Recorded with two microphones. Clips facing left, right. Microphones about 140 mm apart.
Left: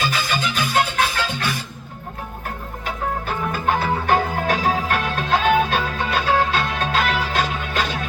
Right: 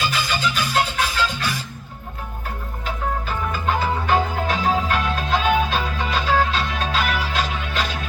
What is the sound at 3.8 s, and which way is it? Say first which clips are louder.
Music: right 1 dB; 60° left (ahead or behind).